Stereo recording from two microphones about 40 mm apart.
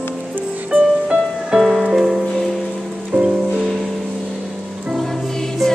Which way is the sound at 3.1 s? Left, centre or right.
Right.